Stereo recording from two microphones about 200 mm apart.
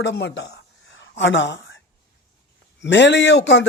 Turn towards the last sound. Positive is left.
turn(degrees=60)  # may be behind; listen again after turning